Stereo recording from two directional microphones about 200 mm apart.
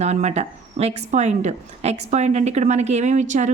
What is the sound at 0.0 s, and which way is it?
A woman's voice, 35° right (ahead or behind).